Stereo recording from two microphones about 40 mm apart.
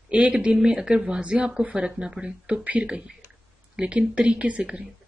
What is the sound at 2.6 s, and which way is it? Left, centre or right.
Speech, right.